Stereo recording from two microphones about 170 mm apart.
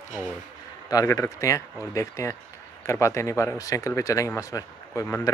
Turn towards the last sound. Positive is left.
turn(degrees=15)  # may be behind; listen again after turning